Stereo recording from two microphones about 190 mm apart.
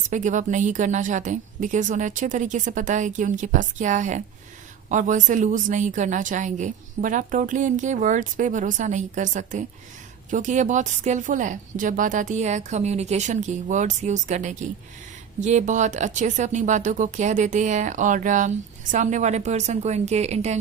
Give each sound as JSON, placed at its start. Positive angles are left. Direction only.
{"t": 0.1, "sound": "speech", "side_deg": -40}